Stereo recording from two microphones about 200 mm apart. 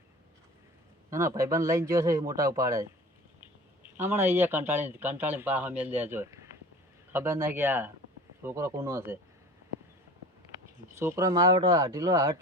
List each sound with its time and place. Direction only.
1.1 s speech: 15° right (ahead or behind)
3.9 s speech: 10° right (ahead or behind)
11.0 s speech: 15° right (ahead or behind)